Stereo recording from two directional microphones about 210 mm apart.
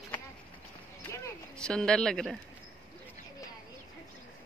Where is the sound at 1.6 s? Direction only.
5° left (ahead or behind).